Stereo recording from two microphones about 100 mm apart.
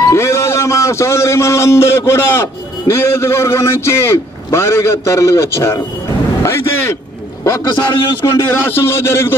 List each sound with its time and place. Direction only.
0.1 s a man's voice: 30° left (ahead or behind)
6.4 s a sound: 25° left (ahead or behind)
7.8 s a man's voice: 45° left (ahead or behind)
8.5 s a man's voice: 25° left (ahead or behind)